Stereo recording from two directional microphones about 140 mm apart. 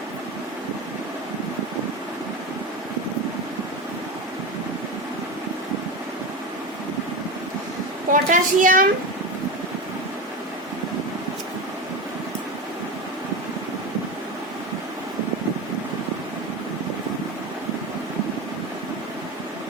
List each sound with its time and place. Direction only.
8.1 s a child's voice: 70° right (ahead or behind)